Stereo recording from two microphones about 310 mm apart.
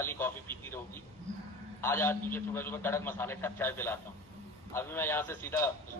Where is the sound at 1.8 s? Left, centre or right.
Centre.